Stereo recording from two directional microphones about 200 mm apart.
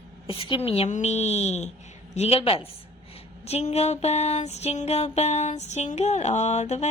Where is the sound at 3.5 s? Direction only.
35° left (ahead or behind).